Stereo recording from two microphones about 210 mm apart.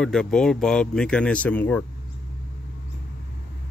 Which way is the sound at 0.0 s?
Centre (ahead or behind).